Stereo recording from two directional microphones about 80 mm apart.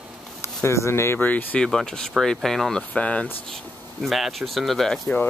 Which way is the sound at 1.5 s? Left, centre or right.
Centre.